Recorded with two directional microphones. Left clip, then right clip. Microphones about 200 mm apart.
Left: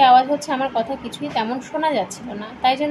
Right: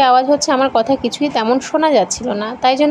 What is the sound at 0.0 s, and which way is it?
A woman's voice, 40° right (ahead or behind).